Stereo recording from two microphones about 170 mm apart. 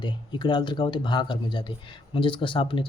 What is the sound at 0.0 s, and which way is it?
A man's voice, 25° left (ahead or behind).